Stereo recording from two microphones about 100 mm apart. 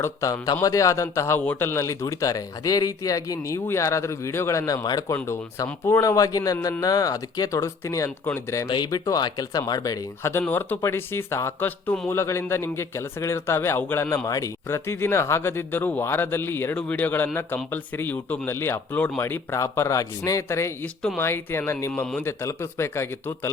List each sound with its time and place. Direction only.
0.0 s speech: 30° left (ahead or behind)
5.1 s speech: 25° left (ahead or behind)
8.6 s speech: 45° left (ahead or behind)
10.5 s speech: 20° left (ahead or behind)
14.3 s speech: 35° left (ahead or behind)